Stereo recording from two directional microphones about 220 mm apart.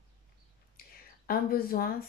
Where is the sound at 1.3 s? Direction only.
40° left (ahead or behind).